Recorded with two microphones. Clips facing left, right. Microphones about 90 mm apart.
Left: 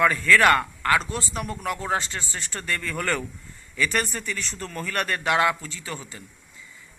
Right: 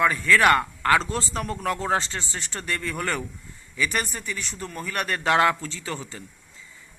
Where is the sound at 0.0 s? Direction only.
25° right (ahead or behind).